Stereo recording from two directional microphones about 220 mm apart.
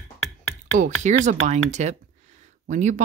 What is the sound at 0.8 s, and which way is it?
Speech, 35° right (ahead or behind).